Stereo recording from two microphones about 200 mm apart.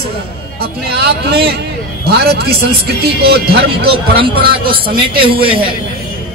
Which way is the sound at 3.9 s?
25° right (ahead or behind).